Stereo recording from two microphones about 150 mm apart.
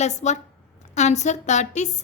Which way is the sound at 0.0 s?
50° left (ahead or behind).